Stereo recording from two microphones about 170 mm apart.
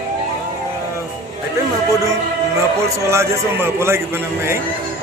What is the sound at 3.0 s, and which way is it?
Speech, 15° right (ahead or behind).